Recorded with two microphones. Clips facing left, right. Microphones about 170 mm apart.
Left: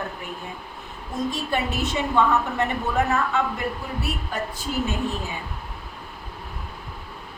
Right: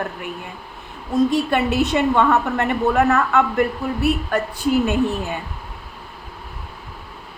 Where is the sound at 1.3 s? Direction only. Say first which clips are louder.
Right 7 dB; 65° right (ahead or behind).